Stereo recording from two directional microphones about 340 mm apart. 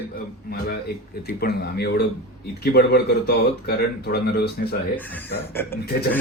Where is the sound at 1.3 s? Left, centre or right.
Left.